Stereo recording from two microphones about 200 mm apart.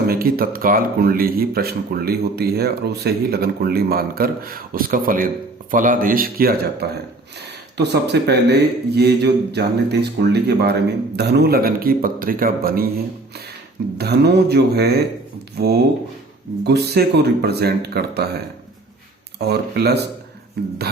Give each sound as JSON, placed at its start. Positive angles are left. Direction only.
{"t": 0.1, "sound": "speech", "side_deg": -50}
{"t": 14.0, "sound": "speech", "side_deg": -55}
{"t": 19.4, "sound": "speech", "side_deg": -55}